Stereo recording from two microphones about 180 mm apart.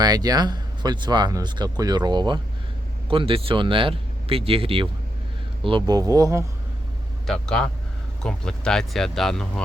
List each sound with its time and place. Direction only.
0.0 s speech: 20° right (ahead or behind)
7.3 s speech: 5° left (ahead or behind)